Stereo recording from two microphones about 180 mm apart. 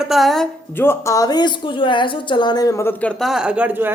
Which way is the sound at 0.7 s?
10° left (ahead or behind).